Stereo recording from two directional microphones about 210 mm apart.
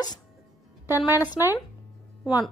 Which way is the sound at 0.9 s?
15° left (ahead or behind).